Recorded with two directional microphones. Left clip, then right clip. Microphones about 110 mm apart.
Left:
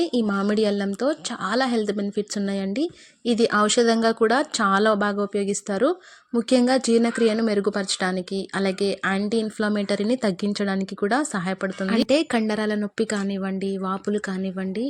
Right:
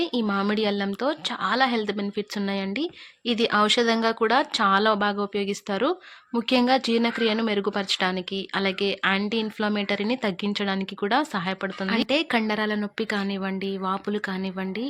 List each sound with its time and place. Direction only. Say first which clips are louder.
0.0 s a woman's voice: left 2 dB; 55° left (ahead or behind)
12.4 s a woman's voice: left 1 dB; 45° left (ahead or behind)